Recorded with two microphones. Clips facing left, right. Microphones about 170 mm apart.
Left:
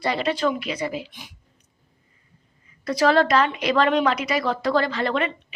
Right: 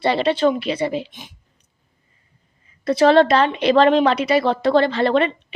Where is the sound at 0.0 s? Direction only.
30° right (ahead or behind).